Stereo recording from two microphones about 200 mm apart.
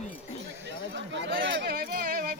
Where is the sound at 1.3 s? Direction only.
55° right (ahead or behind).